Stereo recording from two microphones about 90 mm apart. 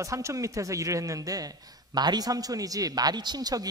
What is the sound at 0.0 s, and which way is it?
A man's voice, 35° right (ahead or behind).